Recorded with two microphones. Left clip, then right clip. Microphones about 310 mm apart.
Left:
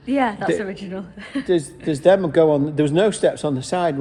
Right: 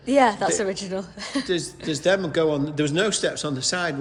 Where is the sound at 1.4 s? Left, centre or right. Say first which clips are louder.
Left 8 dB; centre.